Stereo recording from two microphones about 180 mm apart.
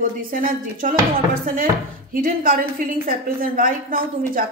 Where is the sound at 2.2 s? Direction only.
50° right (ahead or behind).